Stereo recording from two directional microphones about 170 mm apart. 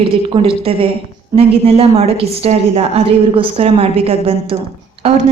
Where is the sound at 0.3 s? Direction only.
30° right (ahead or behind).